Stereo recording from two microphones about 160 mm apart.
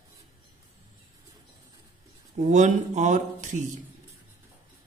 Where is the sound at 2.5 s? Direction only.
50° right (ahead or behind).